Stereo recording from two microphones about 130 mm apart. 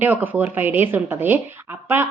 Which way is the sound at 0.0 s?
15° right (ahead or behind).